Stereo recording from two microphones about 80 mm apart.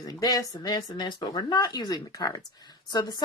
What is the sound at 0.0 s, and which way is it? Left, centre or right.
Speech, left.